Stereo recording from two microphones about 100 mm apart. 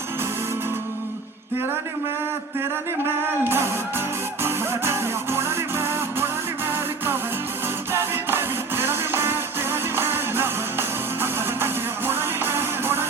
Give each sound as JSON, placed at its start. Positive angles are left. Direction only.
{"t": 3.2, "sound": "music", "side_deg": -25}